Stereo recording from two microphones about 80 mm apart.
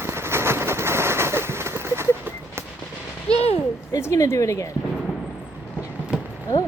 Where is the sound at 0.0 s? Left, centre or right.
Right.